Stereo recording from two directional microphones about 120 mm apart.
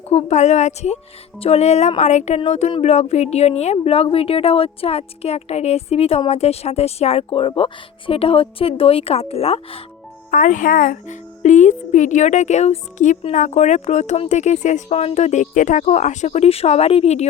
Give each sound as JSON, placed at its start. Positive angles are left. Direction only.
{"t": 0.1, "sound": "a woman's voice", "side_deg": 70}
{"t": 10.3, "sound": "speech", "side_deg": 90}